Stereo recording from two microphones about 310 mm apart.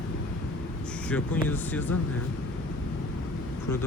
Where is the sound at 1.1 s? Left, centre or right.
Centre.